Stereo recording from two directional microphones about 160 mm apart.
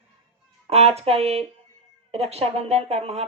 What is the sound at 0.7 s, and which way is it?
Speech, 40° right (ahead or behind).